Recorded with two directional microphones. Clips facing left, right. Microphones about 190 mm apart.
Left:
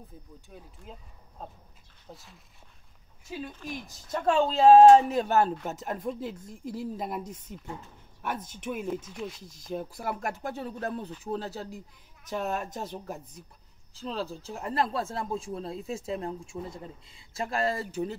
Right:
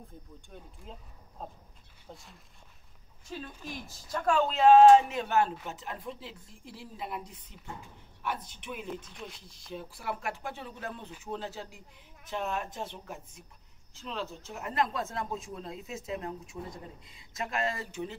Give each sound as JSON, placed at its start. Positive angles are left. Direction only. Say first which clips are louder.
{"t": 0.5, "sound": "speech", "louder": "left 1 dB", "side_deg": 5}
{"t": 4.1, "sound": "speech", "louder": "left 3 dB", "side_deg": 25}
{"t": 9.0, "sound": "speech", "louder": "left 7 dB", "side_deg": 0}
{"t": 9.4, "sound": "speech", "louder": "left 7 dB", "side_deg": 45}